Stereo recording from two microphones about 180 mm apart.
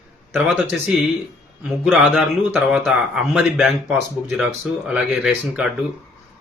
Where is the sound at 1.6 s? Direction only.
5° right (ahead or behind).